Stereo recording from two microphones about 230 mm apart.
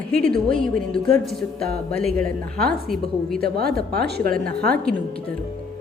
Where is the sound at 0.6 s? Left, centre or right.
Centre.